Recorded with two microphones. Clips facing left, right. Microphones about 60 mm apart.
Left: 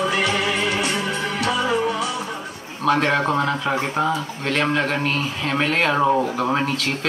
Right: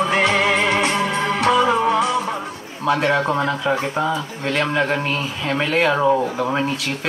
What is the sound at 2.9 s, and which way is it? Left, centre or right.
Speech, centre.